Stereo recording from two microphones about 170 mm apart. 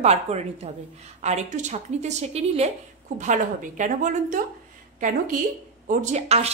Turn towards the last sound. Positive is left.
turn(degrees=-40)  # may be behind; listen again after turning